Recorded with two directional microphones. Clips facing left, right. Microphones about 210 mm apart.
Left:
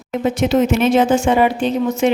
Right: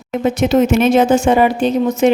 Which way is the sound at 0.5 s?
45° right (ahead or behind).